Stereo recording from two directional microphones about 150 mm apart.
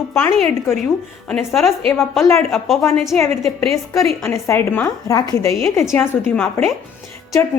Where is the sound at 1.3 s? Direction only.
Centre (ahead or behind).